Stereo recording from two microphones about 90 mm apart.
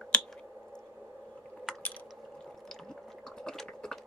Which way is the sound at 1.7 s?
5° right (ahead or behind).